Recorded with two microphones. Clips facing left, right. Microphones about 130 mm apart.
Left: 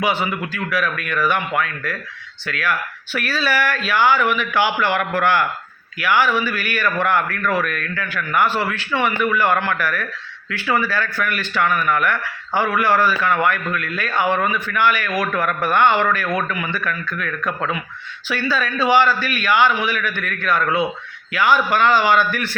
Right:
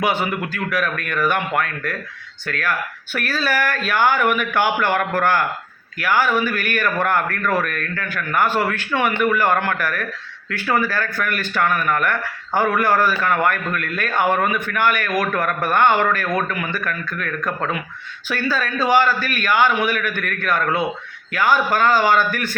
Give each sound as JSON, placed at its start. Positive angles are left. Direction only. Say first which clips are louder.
{"t": 0.0, "sound": "a man's voice", "louder": "even", "side_deg": -50}